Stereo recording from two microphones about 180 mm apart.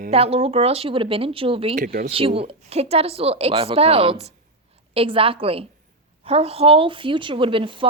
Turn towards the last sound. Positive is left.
turn(degrees=-30)  # may be behind; listen again after turning